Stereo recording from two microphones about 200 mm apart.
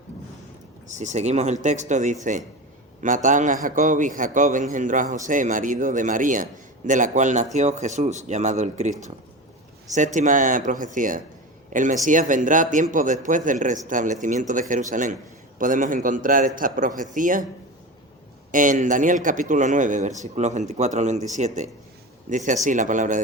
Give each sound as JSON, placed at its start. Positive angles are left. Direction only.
{"t": 0.9, "sound": "a man's voice", "side_deg": -35}
{"t": 18.5, "sound": "a man's voice", "side_deg": -40}